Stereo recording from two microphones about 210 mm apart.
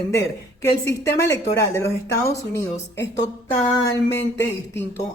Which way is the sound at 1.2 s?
15° left (ahead or behind).